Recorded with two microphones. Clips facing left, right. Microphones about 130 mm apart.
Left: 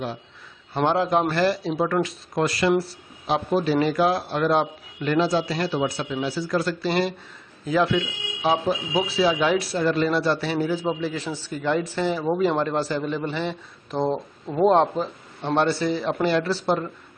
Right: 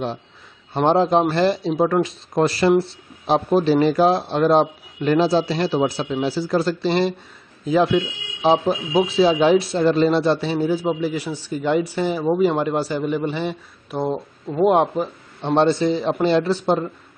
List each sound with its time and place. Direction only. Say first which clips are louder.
0.8 s a man's voice: right 5 dB; 25° right (ahead or behind)